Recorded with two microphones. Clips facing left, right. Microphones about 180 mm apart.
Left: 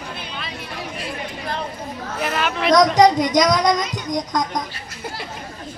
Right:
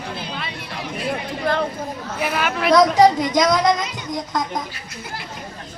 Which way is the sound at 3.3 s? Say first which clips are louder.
Even; 5° right (ahead or behind).